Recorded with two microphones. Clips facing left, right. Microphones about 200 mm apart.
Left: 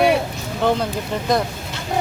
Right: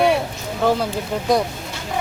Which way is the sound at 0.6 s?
5° right (ahead or behind).